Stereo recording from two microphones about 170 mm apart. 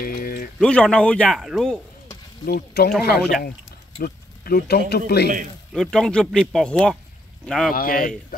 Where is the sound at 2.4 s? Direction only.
70° left (ahead or behind).